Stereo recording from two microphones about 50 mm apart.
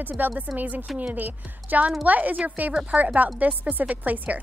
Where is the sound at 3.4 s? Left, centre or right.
Right.